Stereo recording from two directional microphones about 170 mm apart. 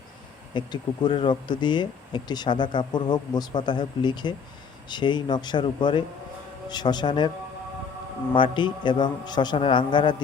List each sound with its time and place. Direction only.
0.5 s speech: 25° left (ahead or behind)
8.3 s speech: 30° left (ahead or behind)